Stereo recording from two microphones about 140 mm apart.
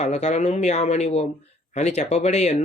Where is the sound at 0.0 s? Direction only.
55° left (ahead or behind).